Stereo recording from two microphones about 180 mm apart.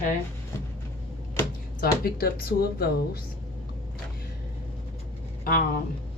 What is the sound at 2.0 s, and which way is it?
Speech, 55° left (ahead or behind).